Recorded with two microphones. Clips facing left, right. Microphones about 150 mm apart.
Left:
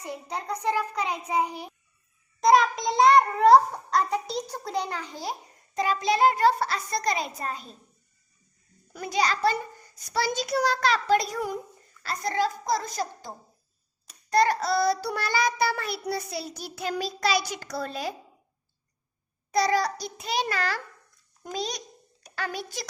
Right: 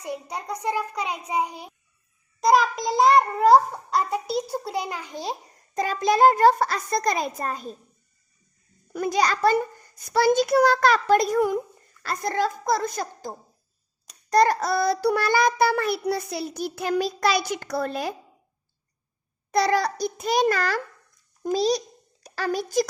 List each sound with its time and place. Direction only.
0.0 s a child's voice: 15° right (ahead or behind)
2.4 s a child's voice: centre (ahead or behind); by 5.4 s 20° right (ahead or behind)
5.7 s child singing: 45° right (ahead or behind)
8.9 s child singing: 50° right (ahead or behind)
14.3 s child singing: 40° right (ahead or behind)
19.5 s child singing: 55° right (ahead or behind)
21.4 s a child's voice: 35° right (ahead or behind)